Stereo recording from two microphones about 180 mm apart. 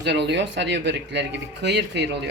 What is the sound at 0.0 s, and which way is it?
Speech, 70° right (ahead or behind).